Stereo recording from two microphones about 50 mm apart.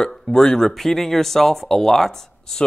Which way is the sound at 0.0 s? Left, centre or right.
Centre.